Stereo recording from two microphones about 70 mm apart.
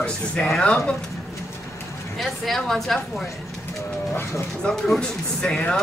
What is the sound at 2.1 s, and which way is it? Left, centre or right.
Speech, centre.